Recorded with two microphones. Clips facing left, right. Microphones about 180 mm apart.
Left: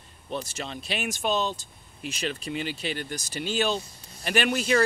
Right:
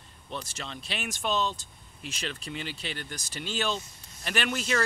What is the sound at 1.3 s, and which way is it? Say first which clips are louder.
Speech: right 1 dB; 40° left (ahead or behind).